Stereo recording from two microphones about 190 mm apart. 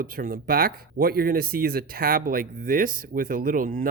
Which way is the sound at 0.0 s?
50° right (ahead or behind).